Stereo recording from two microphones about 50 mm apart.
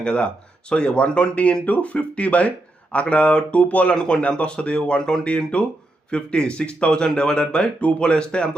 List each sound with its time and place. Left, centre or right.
0.0 s speech: left
3.9 s speech: centre